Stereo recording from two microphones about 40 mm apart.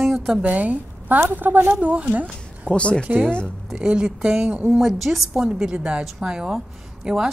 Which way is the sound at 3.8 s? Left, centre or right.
Right.